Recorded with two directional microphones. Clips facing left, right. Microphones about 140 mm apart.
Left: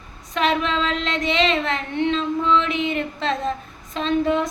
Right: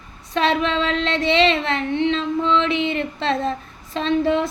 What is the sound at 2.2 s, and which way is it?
Speech, 30° right (ahead or behind).